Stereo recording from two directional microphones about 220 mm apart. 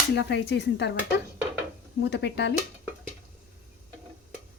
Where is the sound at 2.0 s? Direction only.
50° left (ahead or behind).